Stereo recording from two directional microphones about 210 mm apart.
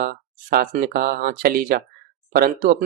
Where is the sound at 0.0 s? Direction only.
45° right (ahead or behind).